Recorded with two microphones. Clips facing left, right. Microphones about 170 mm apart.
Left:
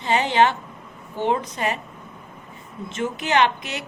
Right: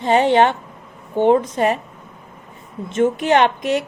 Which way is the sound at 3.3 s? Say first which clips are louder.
Right 5 dB; 45° right (ahead or behind).